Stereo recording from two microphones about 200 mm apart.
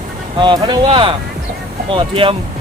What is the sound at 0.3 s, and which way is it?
Speech, 20° right (ahead or behind).